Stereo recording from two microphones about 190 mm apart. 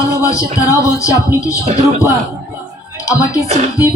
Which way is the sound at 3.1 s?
15° left (ahead or behind).